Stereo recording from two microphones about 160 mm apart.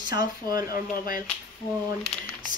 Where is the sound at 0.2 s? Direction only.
25° right (ahead or behind).